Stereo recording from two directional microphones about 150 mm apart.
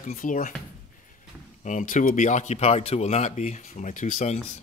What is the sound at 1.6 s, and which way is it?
Speech, 55° left (ahead or behind).